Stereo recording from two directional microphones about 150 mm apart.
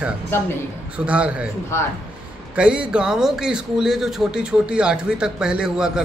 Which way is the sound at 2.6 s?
5° right (ahead or behind).